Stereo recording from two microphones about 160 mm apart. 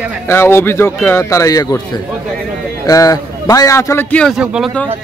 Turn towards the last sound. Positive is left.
turn(degrees=-5)  # may be behind; listen again after turning